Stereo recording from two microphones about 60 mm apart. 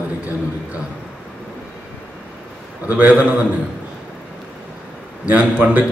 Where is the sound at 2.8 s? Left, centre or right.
Right.